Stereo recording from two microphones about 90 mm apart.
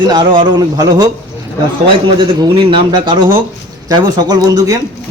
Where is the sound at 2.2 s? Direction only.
65° right (ahead or behind).